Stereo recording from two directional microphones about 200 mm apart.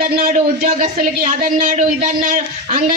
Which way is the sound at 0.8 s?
35° right (ahead or behind).